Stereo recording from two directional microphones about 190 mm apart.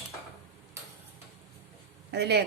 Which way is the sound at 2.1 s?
60° right (ahead or behind).